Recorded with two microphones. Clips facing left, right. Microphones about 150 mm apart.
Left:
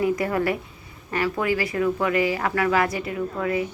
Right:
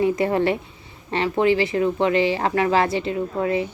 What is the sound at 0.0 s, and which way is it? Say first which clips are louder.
Speech: right 3 dB; 25° right (ahead or behind).